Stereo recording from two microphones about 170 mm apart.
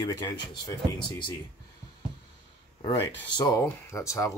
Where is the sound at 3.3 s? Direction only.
25° left (ahead or behind).